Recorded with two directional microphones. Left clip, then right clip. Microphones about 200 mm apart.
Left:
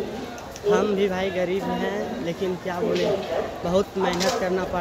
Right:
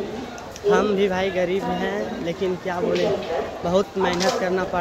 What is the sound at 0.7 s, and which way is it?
Speech, 10° right (ahead or behind).